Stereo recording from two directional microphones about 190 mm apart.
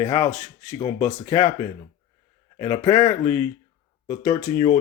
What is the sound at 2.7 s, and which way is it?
Speech, 20° left (ahead or behind).